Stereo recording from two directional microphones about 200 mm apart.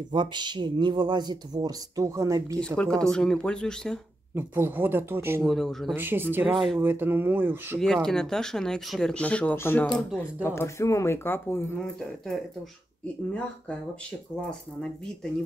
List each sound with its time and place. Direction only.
0.1 s speech: 20° right (ahead or behind)
2.6 s speech: 5° left (ahead or behind)
4.4 s speech: 10° right (ahead or behind)
5.5 s speech: centre (ahead or behind)
5.9 s speech: 10° right (ahead or behind)
7.8 s speech: centre (ahead or behind)